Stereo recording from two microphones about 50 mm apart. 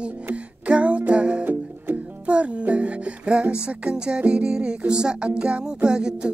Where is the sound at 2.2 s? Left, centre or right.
Right.